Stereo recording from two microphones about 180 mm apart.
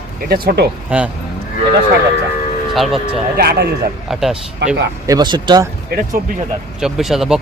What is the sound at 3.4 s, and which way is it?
Speech, 60° right (ahead or behind).